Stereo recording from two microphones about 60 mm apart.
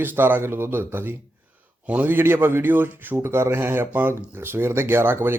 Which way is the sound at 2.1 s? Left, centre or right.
Right.